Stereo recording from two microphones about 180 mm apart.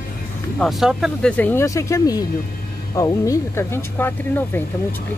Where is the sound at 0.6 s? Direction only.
Centre (ahead or behind).